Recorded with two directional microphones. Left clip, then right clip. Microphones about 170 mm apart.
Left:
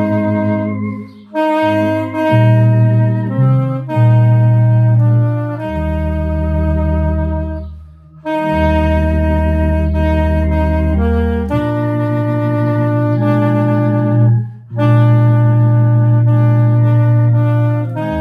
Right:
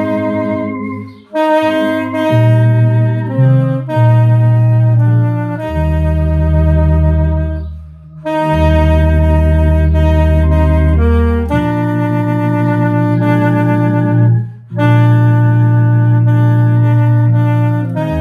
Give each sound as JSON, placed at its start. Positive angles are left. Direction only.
{"t": 1.3, "sound": "saxophone", "side_deg": -20}
{"t": 3.3, "sound": "music", "side_deg": -20}
{"t": 8.4, "sound": "music", "side_deg": -20}
{"t": 10.0, "sound": "music", "side_deg": -20}
{"t": 12.6, "sound": "music", "side_deg": -25}